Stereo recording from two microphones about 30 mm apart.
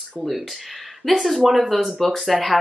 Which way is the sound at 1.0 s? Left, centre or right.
Centre.